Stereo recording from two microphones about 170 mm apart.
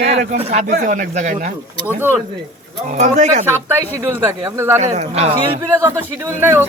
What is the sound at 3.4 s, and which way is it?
Speech, 15° right (ahead or behind).